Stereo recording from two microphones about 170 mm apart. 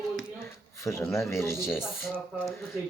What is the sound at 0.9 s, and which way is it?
Speech, 15° left (ahead or behind).